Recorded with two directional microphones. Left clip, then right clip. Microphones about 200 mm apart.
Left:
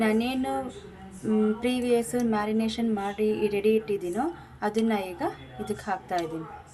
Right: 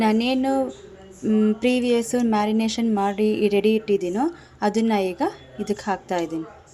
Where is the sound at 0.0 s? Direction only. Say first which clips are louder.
Right 5 dB; 40° right (ahead or behind).